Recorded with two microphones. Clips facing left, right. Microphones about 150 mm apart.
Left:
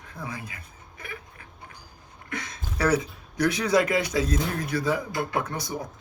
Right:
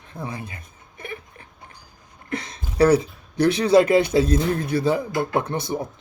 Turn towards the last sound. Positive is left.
turn(degrees=-25)  # may be behind; listen again after turning